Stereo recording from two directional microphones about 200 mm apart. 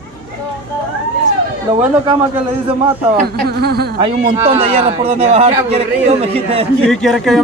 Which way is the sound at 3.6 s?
50° right (ahead or behind).